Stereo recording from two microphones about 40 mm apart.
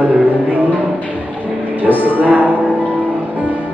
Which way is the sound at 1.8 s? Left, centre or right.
Right.